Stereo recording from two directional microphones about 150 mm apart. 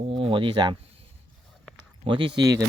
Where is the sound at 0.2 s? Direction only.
35° right (ahead or behind).